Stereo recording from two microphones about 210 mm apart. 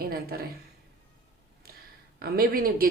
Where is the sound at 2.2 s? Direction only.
45° right (ahead or behind).